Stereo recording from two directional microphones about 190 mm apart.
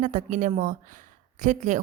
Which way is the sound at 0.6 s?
40° right (ahead or behind).